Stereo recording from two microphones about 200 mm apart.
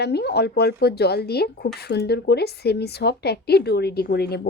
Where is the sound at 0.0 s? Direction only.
55° left (ahead or behind).